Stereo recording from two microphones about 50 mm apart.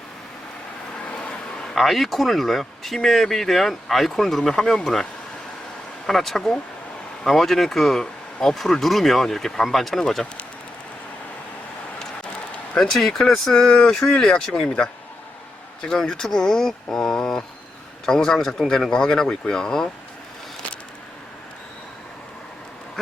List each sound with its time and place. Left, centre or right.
0.9 s vehicle: left
1.6 s speech: centre
6.1 s speech: centre
12.7 s speech: centre